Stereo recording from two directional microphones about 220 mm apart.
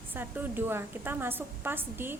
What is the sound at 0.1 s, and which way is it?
A woman's voice, 10° right (ahead or behind).